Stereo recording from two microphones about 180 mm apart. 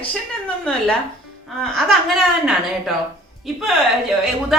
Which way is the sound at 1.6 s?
Centre (ahead or behind).